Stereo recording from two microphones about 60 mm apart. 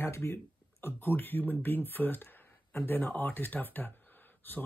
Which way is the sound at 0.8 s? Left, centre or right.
Left.